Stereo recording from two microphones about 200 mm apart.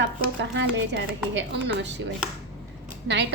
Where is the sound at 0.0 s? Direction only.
60° right (ahead or behind).